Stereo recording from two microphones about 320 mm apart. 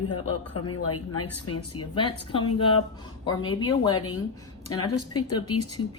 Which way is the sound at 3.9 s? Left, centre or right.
Left.